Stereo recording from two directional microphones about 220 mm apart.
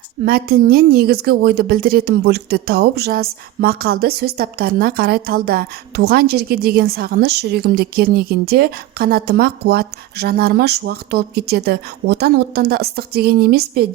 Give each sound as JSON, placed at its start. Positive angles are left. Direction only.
{"t": 0.3, "sound": "a woman's voice", "side_deg": -40}